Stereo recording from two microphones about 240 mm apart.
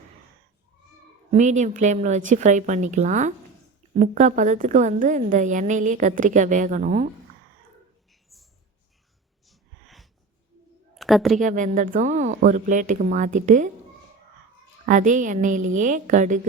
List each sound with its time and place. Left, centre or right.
1.3 s a woman's voice: right
8.3 s mouse: centre
9.5 s wheeze: centre
10.9 s a sound: centre
11.3 s a woman's voice: right
14.8 s a woman's voice: right